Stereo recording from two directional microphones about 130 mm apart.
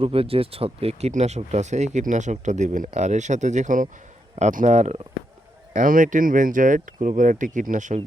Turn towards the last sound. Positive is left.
turn(degrees=-70)  # may be behind; listen again after turning